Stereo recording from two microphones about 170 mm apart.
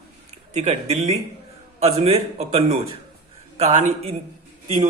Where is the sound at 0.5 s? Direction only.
40° right (ahead or behind).